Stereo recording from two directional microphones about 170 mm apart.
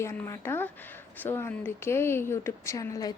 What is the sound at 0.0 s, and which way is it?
Speech, 15° left (ahead or behind).